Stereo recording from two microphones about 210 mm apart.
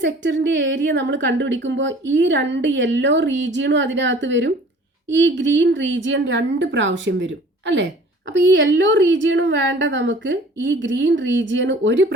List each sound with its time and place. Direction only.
0.0 s a woman's voice: 60° right (ahead or behind)